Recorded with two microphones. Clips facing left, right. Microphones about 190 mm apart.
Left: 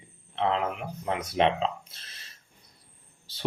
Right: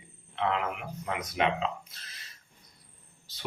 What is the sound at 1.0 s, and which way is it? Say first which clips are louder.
Speech: left 5 dB; 30° left (ahead or behind).